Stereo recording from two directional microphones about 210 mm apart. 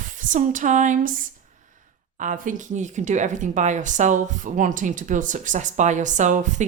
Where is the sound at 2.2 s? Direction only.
40° right (ahead or behind).